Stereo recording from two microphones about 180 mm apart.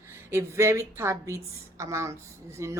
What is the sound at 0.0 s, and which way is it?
A woman's voice, 15° right (ahead or behind).